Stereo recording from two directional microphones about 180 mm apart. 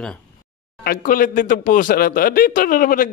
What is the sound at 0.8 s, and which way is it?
Speech, 55° left (ahead or behind).